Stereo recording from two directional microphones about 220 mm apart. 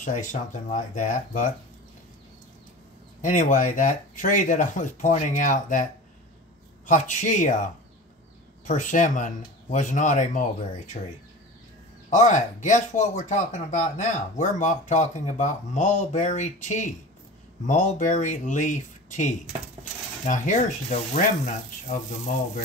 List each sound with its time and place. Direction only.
0.0 s speech: 35° left (ahead or behind)
3.2 s speech: 35° left (ahead or behind)
6.9 s speech: 35° left (ahead or behind)
8.6 s speech: 35° left (ahead or behind)
12.1 s speech: 35° left (ahead or behind)